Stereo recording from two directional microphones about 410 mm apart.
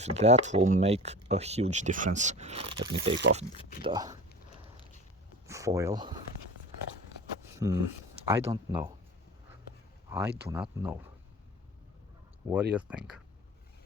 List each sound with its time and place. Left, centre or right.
0.0 s speech: centre
3.2 s speech: right
3.8 s speech: centre
5.5 s speech: centre
7.6 s speech: centre
10.1 s speech: centre
12.7 s speech: centre